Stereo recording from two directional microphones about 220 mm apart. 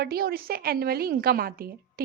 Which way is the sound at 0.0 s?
45° right (ahead or behind).